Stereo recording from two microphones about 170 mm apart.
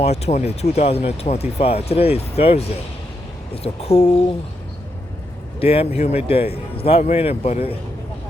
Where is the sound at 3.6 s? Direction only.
35° left (ahead or behind).